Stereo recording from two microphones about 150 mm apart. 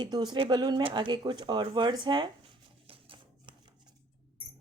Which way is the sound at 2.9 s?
40° right (ahead or behind).